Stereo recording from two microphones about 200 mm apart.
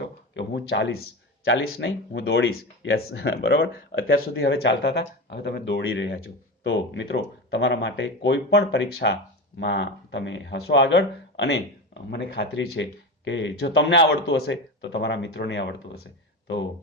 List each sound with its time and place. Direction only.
0.3 s speech: 60° left (ahead or behind)
3.7 s speech: 45° left (ahead or behind)
4.4 s speech: 65° left (ahead or behind)
6.1 s speech: 75° left (ahead or behind); by 16.0 s 60° left (ahead or behind)